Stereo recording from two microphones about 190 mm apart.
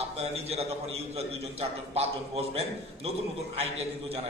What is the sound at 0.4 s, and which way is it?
A man's voice, 30° right (ahead or behind).